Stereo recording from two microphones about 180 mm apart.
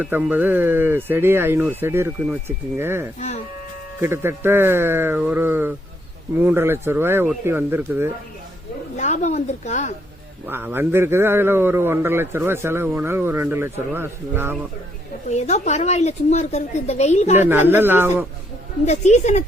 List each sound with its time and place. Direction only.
0.0 s a man's voice: 10° right (ahead or behind)
3.2 s a woman's voice: 40° left (ahead or behind)
4.0 s a man's voice: 15° right (ahead or behind)
9.0 s a woman's voice: 40° left (ahead or behind)
10.4 s a man's voice: 10° right (ahead or behind)
15.3 s a woman's voice: 40° left (ahead or behind)
17.3 s a man's voice: 10° right (ahead or behind)
18.9 s a woman's voice: 40° left (ahead or behind)